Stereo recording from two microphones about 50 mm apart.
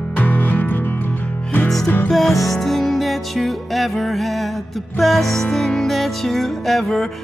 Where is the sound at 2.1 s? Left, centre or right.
Centre.